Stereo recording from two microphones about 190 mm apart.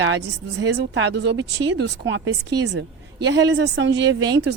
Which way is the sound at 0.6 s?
70° right (ahead or behind).